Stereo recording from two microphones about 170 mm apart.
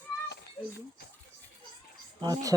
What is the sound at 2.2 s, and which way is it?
Speech, 20° right (ahead or behind).